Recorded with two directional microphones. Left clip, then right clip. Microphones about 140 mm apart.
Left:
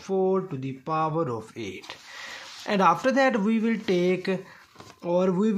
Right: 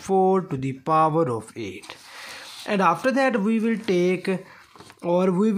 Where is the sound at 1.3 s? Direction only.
15° right (ahead or behind).